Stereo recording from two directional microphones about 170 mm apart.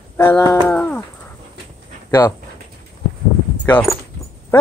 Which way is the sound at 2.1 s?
15° left (ahead or behind).